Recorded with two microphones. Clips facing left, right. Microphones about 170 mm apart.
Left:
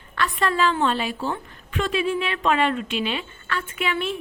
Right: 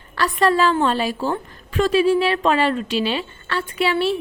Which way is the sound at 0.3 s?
40° right (ahead or behind).